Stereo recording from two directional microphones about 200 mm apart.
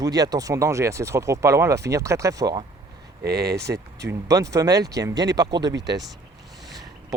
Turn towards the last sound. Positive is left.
turn(degrees=-60)  # may be behind; listen again after turning